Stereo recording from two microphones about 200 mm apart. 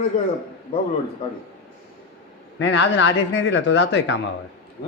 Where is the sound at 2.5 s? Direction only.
60° left (ahead or behind).